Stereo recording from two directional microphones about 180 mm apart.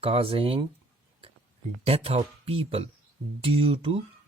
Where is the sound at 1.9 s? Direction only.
35° right (ahead or behind).